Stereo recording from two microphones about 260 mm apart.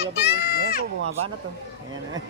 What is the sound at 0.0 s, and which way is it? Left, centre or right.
Run, left.